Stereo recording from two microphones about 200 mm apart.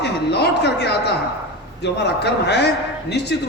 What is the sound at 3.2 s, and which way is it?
Speech, 55° left (ahead or behind).